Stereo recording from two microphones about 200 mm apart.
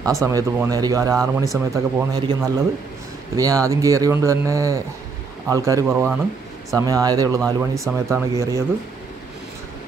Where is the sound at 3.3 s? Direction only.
15° right (ahead or behind).